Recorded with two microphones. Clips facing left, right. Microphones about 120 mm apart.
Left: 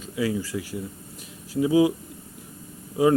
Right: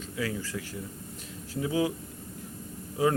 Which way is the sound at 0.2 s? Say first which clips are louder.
Left 7 dB; 10° left (ahead or behind).